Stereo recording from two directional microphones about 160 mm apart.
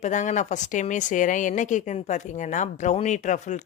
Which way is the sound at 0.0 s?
50° left (ahead or behind).